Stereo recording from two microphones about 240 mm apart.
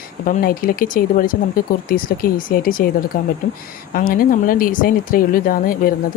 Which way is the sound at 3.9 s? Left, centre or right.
Left.